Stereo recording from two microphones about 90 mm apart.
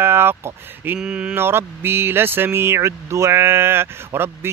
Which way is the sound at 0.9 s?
10° right (ahead or behind).